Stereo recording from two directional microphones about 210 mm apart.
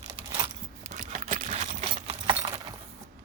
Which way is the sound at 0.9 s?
35° right (ahead or behind).